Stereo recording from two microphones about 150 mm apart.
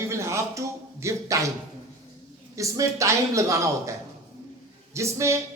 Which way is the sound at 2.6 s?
20° right (ahead or behind).